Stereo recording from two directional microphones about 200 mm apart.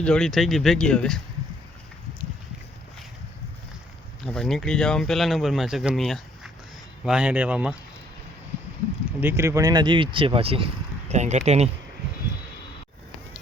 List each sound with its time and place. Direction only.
0.0 s speech: 5° left (ahead or behind)
4.2 s speech: centre (ahead or behind)
9.2 s speech: 10° right (ahead or behind); by 11.7 s 35° right (ahead or behind)